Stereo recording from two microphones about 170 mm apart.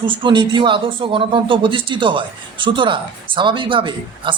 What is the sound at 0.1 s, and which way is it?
Speech, 30° right (ahead or behind).